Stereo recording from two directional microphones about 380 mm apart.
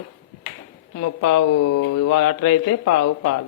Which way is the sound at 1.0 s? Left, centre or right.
Left.